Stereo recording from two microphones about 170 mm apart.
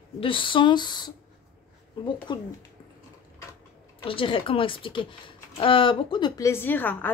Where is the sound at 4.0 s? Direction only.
30° left (ahead or behind).